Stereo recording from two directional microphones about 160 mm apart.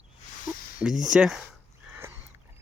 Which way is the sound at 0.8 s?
5° right (ahead or behind).